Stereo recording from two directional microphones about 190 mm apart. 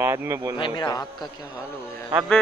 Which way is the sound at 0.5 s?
25° left (ahead or behind).